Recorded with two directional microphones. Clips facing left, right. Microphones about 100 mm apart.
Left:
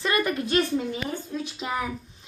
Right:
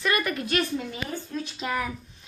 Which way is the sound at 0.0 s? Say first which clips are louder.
Left 1 dB; 25° left (ahead or behind).